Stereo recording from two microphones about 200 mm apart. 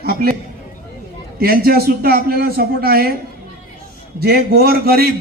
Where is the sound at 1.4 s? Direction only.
50° right (ahead or behind).